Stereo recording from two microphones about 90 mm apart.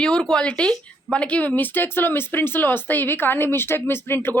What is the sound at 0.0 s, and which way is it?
Speech, 10° left (ahead or behind).